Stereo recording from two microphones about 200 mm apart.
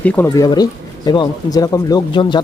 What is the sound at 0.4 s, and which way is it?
Speech, 20° left (ahead or behind).